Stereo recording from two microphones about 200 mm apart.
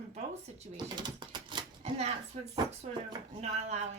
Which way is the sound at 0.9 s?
20° right (ahead or behind).